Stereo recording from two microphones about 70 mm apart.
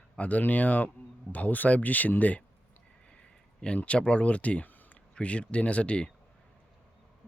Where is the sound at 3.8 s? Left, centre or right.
Centre.